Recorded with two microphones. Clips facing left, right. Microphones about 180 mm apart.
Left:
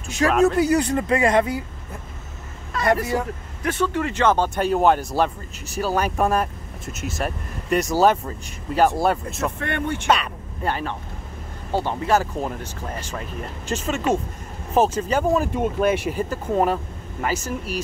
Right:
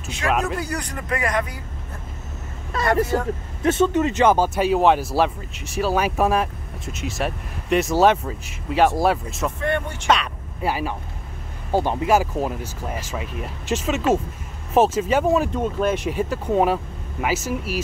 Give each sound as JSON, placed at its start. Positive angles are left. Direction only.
{"t": 0.3, "sound": "speech", "side_deg": -10}
{"t": 0.6, "sound": "speech", "side_deg": 25}
{"t": 3.6, "sound": "speech", "side_deg": -20}
{"t": 9.6, "sound": "speech", "side_deg": 60}
{"t": 10.0, "sound": "speech", "side_deg": 5}
{"t": 15.5, "sound": "speech", "side_deg": 10}